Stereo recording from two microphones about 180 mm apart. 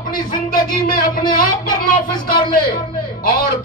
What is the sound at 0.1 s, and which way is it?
A man's voice, 50° left (ahead or behind).